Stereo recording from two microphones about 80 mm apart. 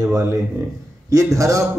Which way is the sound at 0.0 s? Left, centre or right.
Right.